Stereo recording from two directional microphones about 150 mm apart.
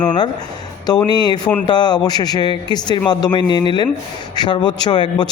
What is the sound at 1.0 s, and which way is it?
Speech, 30° left (ahead or behind).